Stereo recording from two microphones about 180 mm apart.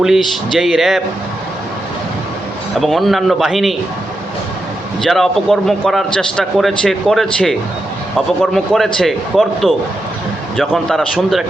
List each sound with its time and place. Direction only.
0.0 s a man's voice: centre (ahead or behind)
2.7 s a man's voice: centre (ahead or behind)
5.0 s a man's voice: centre (ahead or behind)